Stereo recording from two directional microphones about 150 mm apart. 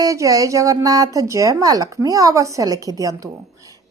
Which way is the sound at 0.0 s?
20° right (ahead or behind).